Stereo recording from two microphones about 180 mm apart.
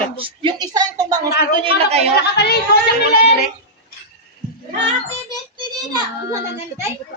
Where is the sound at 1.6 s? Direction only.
35° right (ahead or behind).